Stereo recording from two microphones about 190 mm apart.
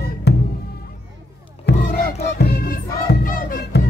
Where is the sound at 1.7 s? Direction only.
60° left (ahead or behind).